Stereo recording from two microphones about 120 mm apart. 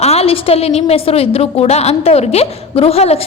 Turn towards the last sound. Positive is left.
turn(degrees=60)  # may be behind; listen again after turning